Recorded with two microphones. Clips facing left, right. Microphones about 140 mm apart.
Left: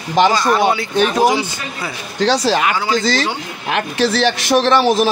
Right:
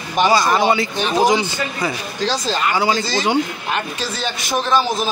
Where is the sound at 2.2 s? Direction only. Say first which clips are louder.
Left 6 dB; 80° left.